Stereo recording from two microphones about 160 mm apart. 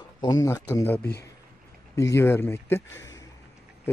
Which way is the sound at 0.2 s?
25° left (ahead or behind).